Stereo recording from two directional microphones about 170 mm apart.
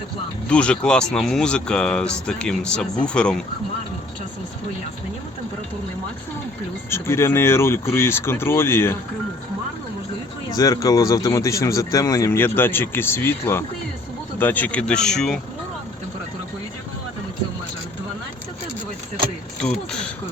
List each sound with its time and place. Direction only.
0.4 s speech: 5° left (ahead or behind)
6.9 s speech: 15° left (ahead or behind)
10.5 s speech: 20° left (ahead or behind); by 15.4 s 5° left (ahead or behind)
19.6 s speech: 5° left (ahead or behind)